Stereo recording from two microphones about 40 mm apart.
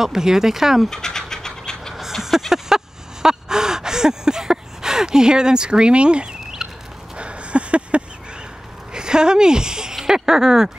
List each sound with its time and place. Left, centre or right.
0.0 s speech: centre
0.8 s scratch: centre
2.2 s gasp: centre; by 6.3 s right
6.6 s a sound: centre
7.2 s a sound: right
8.9 s speech: centre